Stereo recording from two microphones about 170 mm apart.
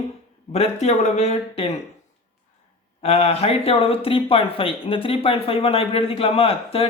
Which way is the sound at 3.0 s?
35° left (ahead or behind).